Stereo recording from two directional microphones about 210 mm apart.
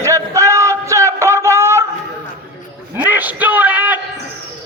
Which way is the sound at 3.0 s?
10° right (ahead or behind).